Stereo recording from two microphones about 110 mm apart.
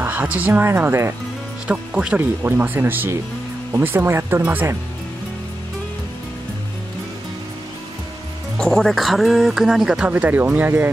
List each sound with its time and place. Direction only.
0.0 s speech: 15° right (ahead or behind)
1.7 s speech: 10° right (ahead or behind)
8.5 s speech: 5° left (ahead or behind); by 10.9 s 15° right (ahead or behind)